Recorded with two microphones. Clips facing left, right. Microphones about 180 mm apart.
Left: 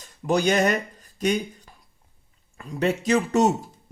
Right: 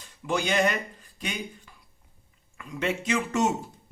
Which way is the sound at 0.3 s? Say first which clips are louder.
Left 5 dB; 40° left (ahead or behind).